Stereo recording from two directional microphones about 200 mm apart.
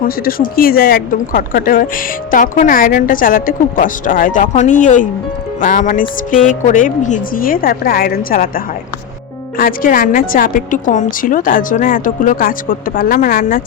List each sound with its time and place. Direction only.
0.0 s speech: 45° left (ahead or behind)